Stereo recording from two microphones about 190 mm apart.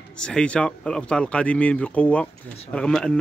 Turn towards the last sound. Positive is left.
turn(degrees=5)  # may be behind; listen again after turning